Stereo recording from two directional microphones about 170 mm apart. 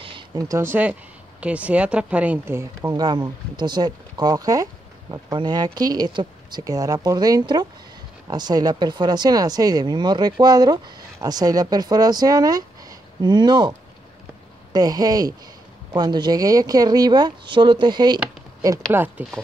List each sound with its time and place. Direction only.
0.0 s speech: 25° right (ahead or behind)
18.9 s speech: 10° right (ahead or behind)